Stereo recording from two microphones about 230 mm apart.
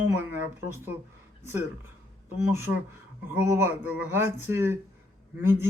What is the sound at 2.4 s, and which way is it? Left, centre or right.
Speech, centre.